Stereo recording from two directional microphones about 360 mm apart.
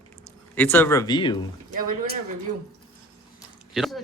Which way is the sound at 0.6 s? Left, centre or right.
Centre.